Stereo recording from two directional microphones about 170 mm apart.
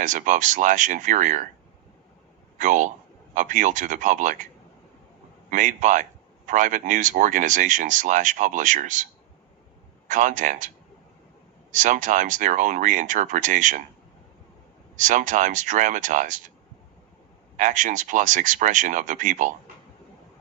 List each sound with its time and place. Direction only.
0.0 s speech: 50° right (ahead or behind)
2.6 s speech: 45° right (ahead or behind)
5.5 s speech: 50° right (ahead or behind)
10.1 s speech: 50° right (ahead or behind)
11.7 s speech: 50° right (ahead or behind)
14.9 s speech: 50° right (ahead or behind)
17.6 s speech: 50° right (ahead or behind)